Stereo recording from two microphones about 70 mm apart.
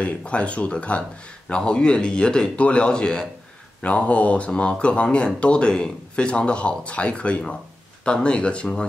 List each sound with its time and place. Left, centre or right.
0.0 s speech: centre